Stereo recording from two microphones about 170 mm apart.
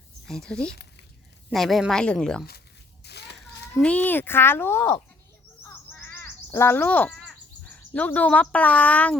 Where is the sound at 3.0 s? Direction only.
75° left (ahead or behind).